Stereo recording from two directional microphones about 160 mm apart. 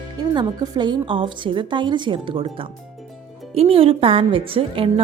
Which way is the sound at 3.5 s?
35° right (ahead or behind).